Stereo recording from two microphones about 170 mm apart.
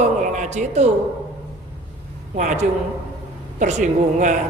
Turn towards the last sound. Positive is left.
turn(degrees=-45)  # may be behind; listen again after turning